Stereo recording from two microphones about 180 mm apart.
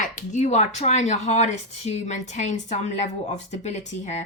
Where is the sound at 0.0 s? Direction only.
45° left (ahead or behind).